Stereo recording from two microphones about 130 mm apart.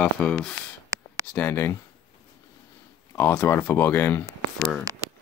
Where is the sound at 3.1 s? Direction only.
20° left (ahead or behind).